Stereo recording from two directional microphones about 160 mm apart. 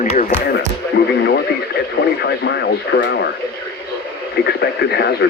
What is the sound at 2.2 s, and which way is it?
Speech, 80° left.